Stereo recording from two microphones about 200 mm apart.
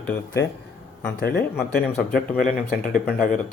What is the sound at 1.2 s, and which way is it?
Speech, 50° left (ahead or behind).